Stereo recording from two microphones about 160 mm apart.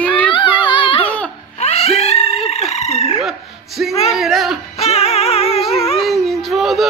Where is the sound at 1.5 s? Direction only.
40° left (ahead or behind).